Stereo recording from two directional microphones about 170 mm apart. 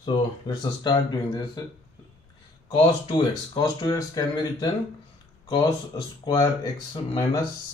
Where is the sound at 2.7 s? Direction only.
35° left (ahead or behind).